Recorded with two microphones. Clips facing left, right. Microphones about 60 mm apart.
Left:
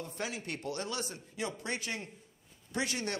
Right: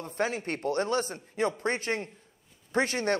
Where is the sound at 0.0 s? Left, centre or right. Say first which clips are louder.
Right 8 dB; right.